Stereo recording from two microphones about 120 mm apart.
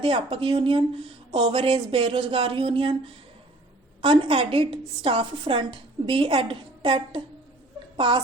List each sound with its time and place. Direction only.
0.0 s a woman's voice: 45° right (ahead or behind)
4.0 s a woman's voice: 45° right (ahead or behind)